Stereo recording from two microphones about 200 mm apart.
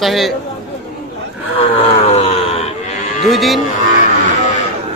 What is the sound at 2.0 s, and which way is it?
Groan, 30° left (ahead or behind).